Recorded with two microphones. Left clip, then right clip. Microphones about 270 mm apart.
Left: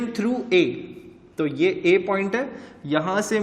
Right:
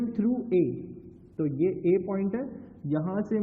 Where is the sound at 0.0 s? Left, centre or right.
Centre.